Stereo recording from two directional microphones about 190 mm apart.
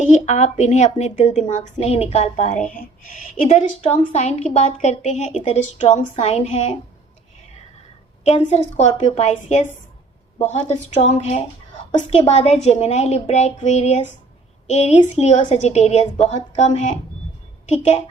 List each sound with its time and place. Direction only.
0.0 s a woman's voice: 35° left (ahead or behind)
8.2 s a woman's voice: 35° left (ahead or behind)